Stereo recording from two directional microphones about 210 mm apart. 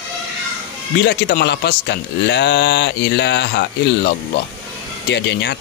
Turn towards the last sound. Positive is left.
turn(degrees=55)  # may be behind; listen again after turning